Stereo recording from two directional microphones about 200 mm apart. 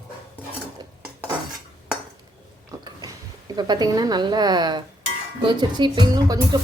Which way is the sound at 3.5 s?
20° right (ahead or behind).